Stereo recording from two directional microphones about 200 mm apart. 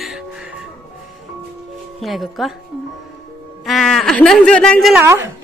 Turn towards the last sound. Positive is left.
turn(degrees=-10)  # may be behind; listen again after turning